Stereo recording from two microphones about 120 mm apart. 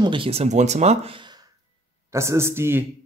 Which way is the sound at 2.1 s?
25° right (ahead or behind).